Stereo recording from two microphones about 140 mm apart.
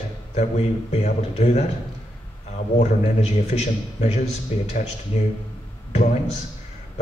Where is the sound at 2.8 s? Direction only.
55° left (ahead or behind).